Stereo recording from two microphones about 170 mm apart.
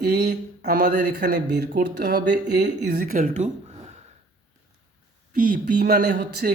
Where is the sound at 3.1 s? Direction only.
50° right (ahead or behind).